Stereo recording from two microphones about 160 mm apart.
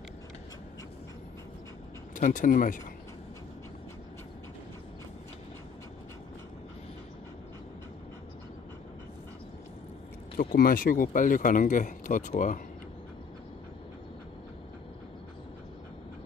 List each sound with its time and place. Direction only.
2.1 s speech: 55° left (ahead or behind)
10.3 s speech: 65° left (ahead or behind)